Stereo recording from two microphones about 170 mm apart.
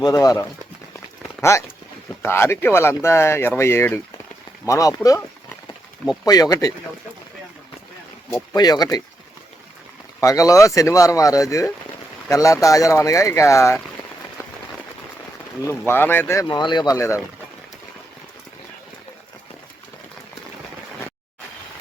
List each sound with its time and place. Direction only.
0.0 s speech: 20° left (ahead or behind)
0.9 s a sound: 15° left (ahead or behind)
2.2 s speech: 15° left (ahead or behind)
6.2 s speech: 20° left (ahead or behind)
8.3 s speech: 25° left (ahead or behind)
10.2 s speech: 20° left (ahead or behind)
15.9 s speech: 10° left (ahead or behind)